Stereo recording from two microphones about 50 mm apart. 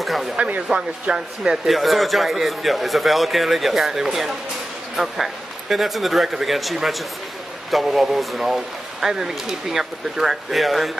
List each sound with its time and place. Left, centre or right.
0.0 s a sound: centre
0.4 s speech: right
1.7 s speech: centre